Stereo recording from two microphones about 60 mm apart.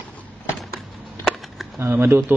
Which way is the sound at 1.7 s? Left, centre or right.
Right.